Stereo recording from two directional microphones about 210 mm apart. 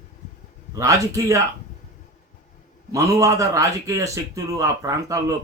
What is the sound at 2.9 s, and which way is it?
A man's voice, 15° right (ahead or behind).